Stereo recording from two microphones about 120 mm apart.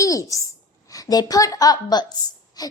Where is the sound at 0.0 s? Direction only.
30° left (ahead or behind).